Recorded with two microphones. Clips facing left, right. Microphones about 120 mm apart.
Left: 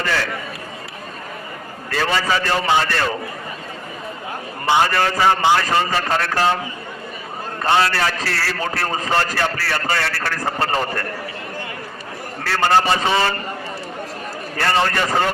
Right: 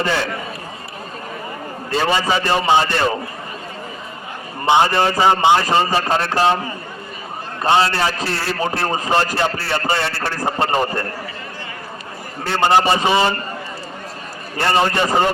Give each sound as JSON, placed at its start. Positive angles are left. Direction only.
{"t": 0.0, "sound": "a man's voice", "side_deg": -20}
{"t": 1.9, "sound": "a man's voice", "side_deg": -20}
{"t": 4.6, "sound": "a man's voice", "side_deg": -20}
{"t": 7.6, "sound": "a man's voice", "side_deg": -20}
{"t": 12.5, "sound": "a man's voice", "side_deg": -20}
{"t": 14.5, "sound": "a man's voice", "side_deg": -20}